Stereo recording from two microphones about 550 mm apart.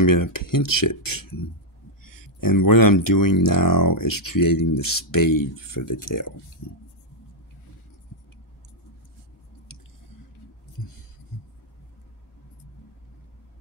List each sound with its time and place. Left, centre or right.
0.0 s speech: left